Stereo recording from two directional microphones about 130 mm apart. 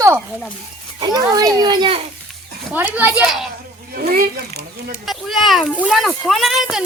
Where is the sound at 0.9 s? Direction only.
30° right (ahead or behind).